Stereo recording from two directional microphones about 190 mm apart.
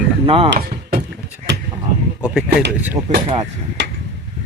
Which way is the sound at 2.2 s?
5° right (ahead or behind).